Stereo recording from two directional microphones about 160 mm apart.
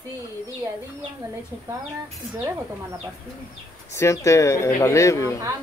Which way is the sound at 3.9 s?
20° left (ahead or behind).